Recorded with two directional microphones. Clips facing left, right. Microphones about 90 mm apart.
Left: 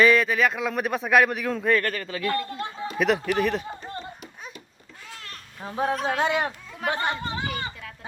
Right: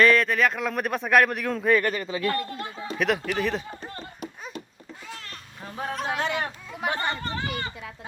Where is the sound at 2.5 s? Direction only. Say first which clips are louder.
Left 2 dB; 25° left (ahead or behind).